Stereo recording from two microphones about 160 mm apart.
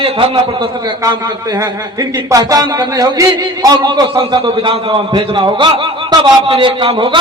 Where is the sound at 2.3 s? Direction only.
25° right (ahead or behind).